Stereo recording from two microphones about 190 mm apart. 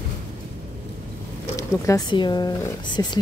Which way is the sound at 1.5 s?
15° left (ahead or behind).